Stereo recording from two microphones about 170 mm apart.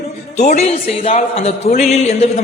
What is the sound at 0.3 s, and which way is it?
A man's voice, 40° left (ahead or behind).